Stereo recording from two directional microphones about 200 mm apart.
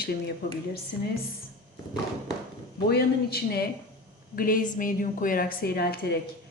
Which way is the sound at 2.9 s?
50° left (ahead or behind).